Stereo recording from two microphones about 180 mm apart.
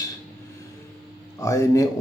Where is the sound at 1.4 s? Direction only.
20° left (ahead or behind).